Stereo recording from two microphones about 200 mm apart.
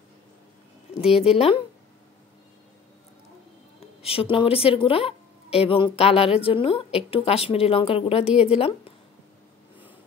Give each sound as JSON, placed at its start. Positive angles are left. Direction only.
{"t": 1.0, "sound": "a woman's voice", "side_deg": -5}
{"t": 1.3, "sound": "a woman's voice", "side_deg": 30}
{"t": 4.0, "sound": "a woman's voice", "side_deg": 30}